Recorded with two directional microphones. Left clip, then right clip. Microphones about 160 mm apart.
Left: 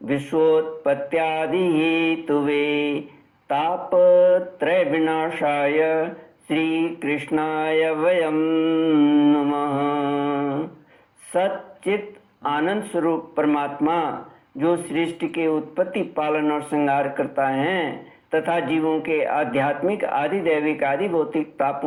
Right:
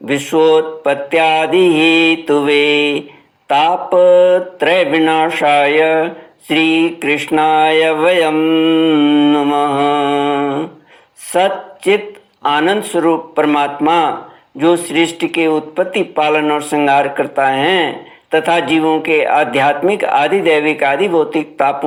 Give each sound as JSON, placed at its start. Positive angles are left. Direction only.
{"t": 0.1, "sound": "speech", "side_deg": -30}